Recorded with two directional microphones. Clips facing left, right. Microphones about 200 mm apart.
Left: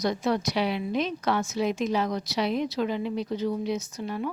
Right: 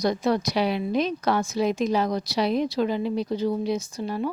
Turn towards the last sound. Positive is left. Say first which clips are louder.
# right 3 dB
turn(degrees=-35)  # may be behind; listen again after turning